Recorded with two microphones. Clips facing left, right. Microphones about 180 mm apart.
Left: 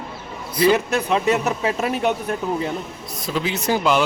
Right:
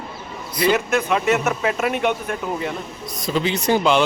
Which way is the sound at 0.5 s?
35° left (ahead or behind).